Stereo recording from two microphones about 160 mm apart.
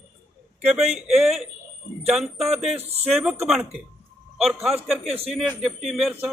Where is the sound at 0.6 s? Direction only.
5° right (ahead or behind).